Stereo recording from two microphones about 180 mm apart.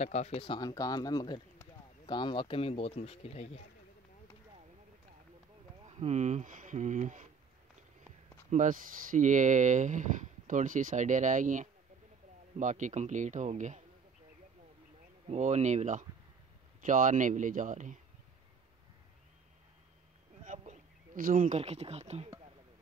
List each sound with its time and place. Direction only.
0.0 s speech: 40° left (ahead or behind)
5.9 s speech: 40° right (ahead or behind)
8.5 s speech: 45° right (ahead or behind)
15.2 s speech: 40° right (ahead or behind)
20.4 s speech: 40° right (ahead or behind)